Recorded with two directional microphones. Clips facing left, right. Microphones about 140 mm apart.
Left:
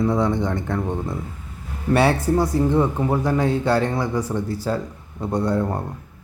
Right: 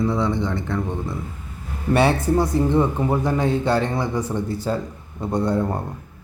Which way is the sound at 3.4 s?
20° right (ahead or behind).